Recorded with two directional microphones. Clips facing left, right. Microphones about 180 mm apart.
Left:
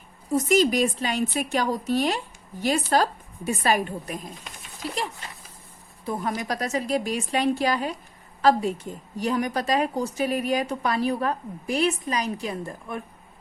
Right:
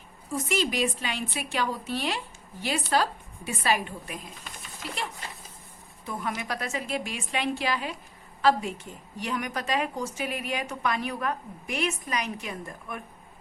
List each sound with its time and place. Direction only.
0.3 s a woman's voice: 40° left (ahead or behind)
6.1 s a woman's voice: 40° left (ahead or behind)